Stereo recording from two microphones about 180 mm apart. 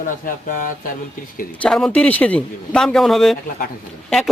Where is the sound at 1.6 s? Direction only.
5° left (ahead or behind).